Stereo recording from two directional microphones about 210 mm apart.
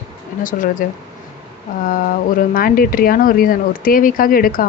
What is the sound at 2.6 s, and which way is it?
Speech, 45° left (ahead or behind).